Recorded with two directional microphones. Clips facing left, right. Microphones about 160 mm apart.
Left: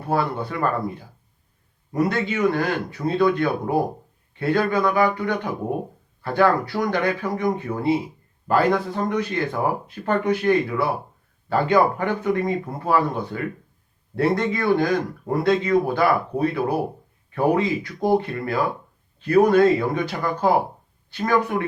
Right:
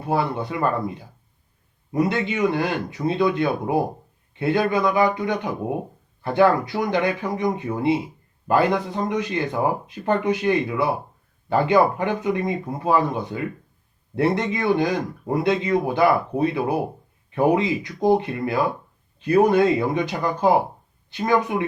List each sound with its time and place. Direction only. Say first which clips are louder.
0.1 s speech: even; 15° right (ahead or behind)
1.9 s speech: even; 20° right (ahead or behind)